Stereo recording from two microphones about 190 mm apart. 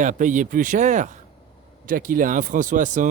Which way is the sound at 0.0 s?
40° right (ahead or behind).